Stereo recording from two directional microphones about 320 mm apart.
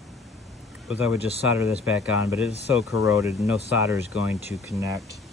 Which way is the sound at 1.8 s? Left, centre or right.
Centre.